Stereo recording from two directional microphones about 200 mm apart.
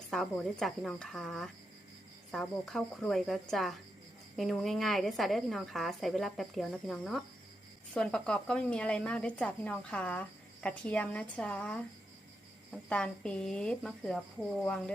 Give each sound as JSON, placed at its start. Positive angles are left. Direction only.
{"t": 0.1, "sound": "speech", "side_deg": 0}